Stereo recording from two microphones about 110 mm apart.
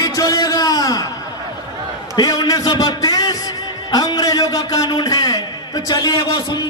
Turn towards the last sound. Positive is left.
turn(degrees=40)  # may be behind; listen again after turning